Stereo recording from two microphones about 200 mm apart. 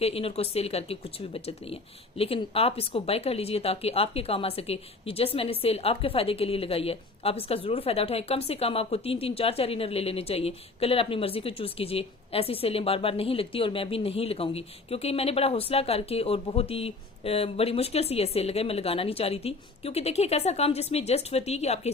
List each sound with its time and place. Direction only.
0.0 s speech: 30° left (ahead or behind)